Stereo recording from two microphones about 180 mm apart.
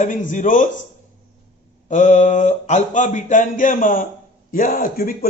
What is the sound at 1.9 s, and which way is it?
A man's voice, 40° left (ahead or behind).